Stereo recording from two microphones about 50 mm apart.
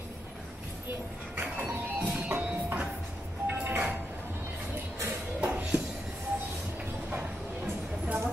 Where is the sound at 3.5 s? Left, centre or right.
Right.